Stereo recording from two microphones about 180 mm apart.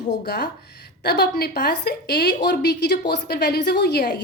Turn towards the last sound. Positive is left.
turn(degrees=65)  # may be behind; listen again after turning